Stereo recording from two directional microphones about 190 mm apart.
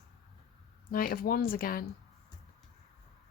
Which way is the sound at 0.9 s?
50° left (ahead or behind).